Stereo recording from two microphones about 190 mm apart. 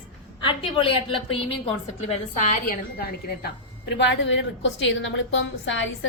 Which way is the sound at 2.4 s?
45° left (ahead or behind).